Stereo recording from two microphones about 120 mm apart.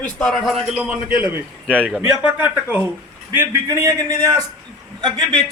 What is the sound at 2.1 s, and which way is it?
A man's voice, 10° right (ahead or behind).